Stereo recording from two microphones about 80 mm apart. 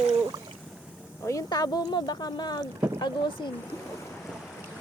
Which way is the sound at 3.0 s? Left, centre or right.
Left.